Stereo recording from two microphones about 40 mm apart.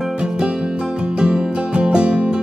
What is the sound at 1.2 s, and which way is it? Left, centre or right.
Music, centre.